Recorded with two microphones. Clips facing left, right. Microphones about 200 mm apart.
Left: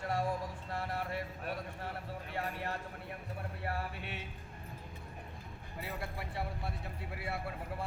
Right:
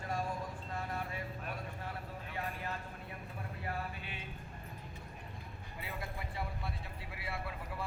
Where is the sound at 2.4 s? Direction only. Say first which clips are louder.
Left 2 dB; 70° left (ahead or behind).